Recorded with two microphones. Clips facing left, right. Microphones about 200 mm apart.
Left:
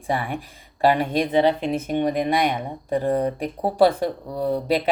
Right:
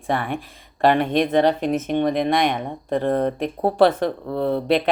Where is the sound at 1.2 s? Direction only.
50° right (ahead or behind).